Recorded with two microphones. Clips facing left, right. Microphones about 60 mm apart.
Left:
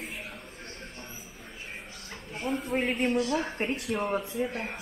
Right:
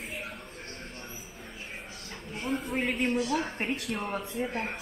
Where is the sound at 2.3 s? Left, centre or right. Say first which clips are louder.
Left 2 dB; centre.